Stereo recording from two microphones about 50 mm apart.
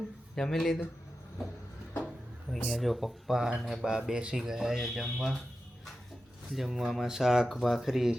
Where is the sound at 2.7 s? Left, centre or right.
Centre.